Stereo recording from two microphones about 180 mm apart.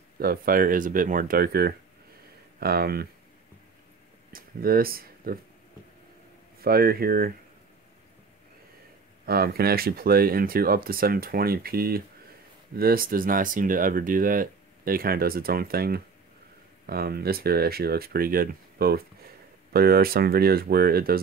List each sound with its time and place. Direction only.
0.2 s speech: 55° right (ahead or behind)
4.3 s speech: 55° right (ahead or behind)
6.6 s speech: 55° right (ahead or behind)
9.2 s speech: 55° right (ahead or behind)